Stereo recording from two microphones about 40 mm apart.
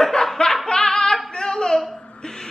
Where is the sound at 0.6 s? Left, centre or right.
Centre.